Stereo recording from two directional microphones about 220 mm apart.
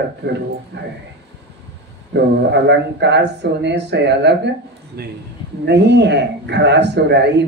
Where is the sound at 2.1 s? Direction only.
50° right (ahead or behind).